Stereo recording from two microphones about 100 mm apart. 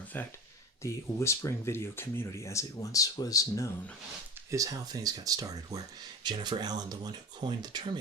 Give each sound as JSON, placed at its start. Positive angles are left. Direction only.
{"t": 0.8, "sound": "speech", "side_deg": 30}
{"t": 4.5, "sound": "speech", "side_deg": -35}
{"t": 6.2, "sound": "speech", "side_deg": -50}